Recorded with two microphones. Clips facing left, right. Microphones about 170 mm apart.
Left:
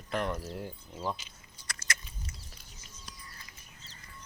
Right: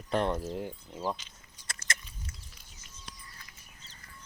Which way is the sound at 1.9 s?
25° right (ahead or behind).